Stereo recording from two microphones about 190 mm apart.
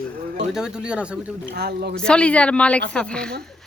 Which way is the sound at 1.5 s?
60° right (ahead or behind).